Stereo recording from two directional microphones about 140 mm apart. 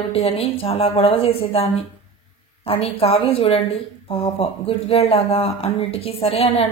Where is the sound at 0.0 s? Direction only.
45° left (ahead or behind).